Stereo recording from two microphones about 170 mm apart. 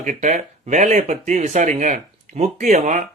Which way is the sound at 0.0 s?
45° right (ahead or behind).